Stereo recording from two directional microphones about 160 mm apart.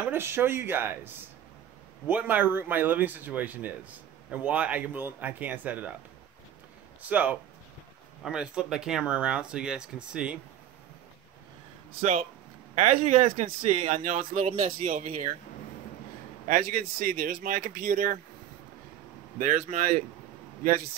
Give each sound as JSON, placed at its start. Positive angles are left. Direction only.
{"t": 0.0, "sound": "speech", "side_deg": -15}
{"t": 7.0, "sound": "speech", "side_deg": -10}
{"t": 12.7, "sound": "speech", "side_deg": -45}
{"t": 16.4, "sound": "speech", "side_deg": -55}
{"t": 19.3, "sound": "speech", "side_deg": -55}